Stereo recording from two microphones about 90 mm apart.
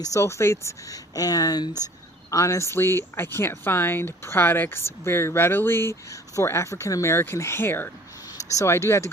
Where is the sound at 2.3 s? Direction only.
35° left (ahead or behind).